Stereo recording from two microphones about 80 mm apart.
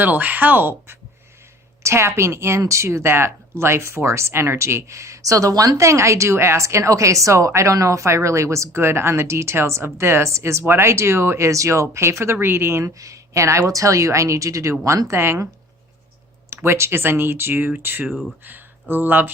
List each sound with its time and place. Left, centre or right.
0.0 s speech: right
16.5 s speech: right
18.1 s speech: centre
18.4 s speech: right